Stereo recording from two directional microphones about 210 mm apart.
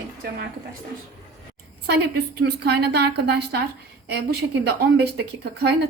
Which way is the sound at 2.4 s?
50° right (ahead or behind).